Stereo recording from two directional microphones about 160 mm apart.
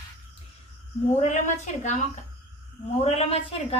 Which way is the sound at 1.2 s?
45° left (ahead or behind).